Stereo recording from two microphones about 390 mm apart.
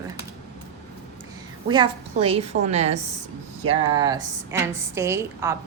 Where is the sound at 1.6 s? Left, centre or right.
Centre.